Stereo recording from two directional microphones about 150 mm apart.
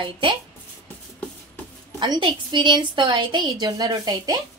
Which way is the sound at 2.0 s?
30° right (ahead or behind).